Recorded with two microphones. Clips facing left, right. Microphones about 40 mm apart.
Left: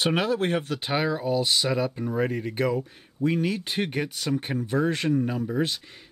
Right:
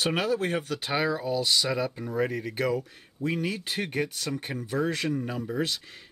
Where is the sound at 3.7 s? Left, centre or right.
Left.